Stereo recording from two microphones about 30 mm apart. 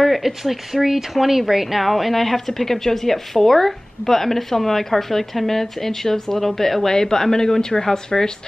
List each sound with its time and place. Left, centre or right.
0.2 s speech: centre
6.9 s speech: centre